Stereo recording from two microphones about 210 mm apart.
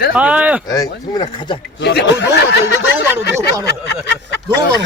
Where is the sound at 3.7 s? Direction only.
55° left (ahead or behind).